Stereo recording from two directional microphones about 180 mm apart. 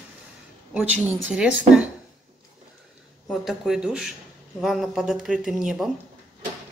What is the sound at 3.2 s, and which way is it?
Speech, centre (ahead or behind).